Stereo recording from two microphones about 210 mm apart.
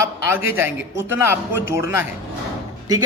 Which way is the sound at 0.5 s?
10° right (ahead or behind).